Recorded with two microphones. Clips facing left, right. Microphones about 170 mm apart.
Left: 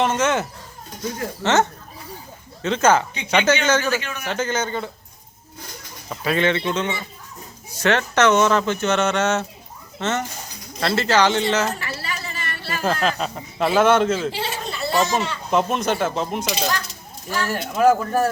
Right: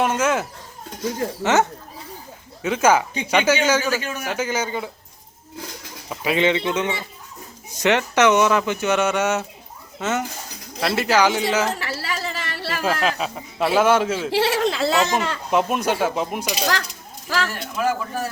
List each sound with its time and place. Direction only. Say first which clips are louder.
0.0 s speech: even; 10° right (ahead or behind)
6.1 s speech: right 1 dB; 15° right (ahead or behind)
11.8 s a sound: right 3 dB; 90° right
12.8 s speech: left 1 dB; 5° right (ahead or behind)
14.3 s a sound: right 7 dB; 75° right (ahead or behind)
15.4 s speech: even; 10° right (ahead or behind)
17.2 s speech: right 1 dB; 90° right
17.5 s speech: left 7 dB; 45° left (ahead or behind)